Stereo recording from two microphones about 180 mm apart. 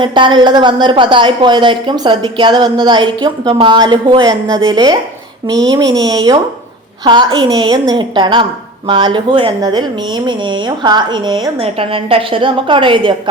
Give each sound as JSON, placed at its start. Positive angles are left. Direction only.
{"t": 0.0, "sound": "a woman's voice", "side_deg": -25}